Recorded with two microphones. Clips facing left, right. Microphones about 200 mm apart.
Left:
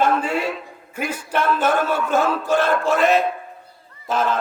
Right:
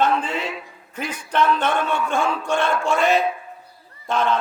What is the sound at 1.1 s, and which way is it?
A man's voice, 10° left (ahead or behind).